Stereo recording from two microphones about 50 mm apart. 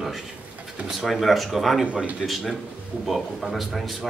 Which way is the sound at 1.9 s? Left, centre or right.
Right.